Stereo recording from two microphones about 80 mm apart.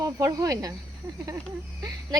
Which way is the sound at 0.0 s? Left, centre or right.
Right.